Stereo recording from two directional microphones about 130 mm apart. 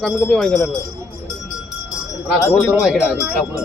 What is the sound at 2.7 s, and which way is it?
Speech, centre (ahead or behind).